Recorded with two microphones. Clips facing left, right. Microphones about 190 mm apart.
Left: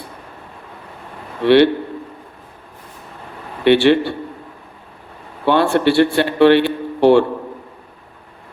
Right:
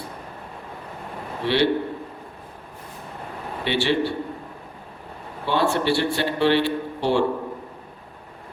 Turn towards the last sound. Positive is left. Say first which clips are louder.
# left 9 dB
turn(degrees=60)  # may be behind; listen again after turning